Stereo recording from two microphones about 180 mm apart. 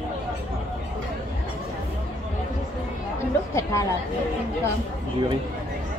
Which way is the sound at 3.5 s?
15° left (ahead or behind).